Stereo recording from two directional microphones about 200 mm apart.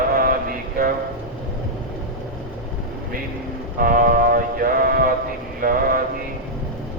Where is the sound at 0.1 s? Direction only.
45° right (ahead or behind).